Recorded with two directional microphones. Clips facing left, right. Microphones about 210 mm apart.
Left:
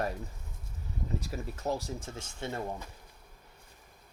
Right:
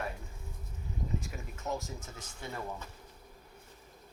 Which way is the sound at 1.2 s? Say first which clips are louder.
Left 5 dB; 35° left (ahead or behind).